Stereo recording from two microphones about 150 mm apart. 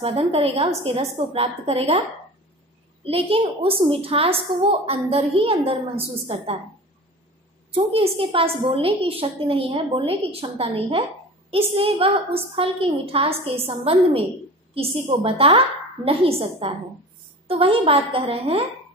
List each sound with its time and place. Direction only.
0.0 s a woman's voice: 40° right (ahead or behind)
7.7 s a woman's voice: 40° right (ahead or behind)